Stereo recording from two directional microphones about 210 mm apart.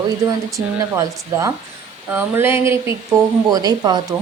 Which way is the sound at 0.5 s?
15° right (ahead or behind).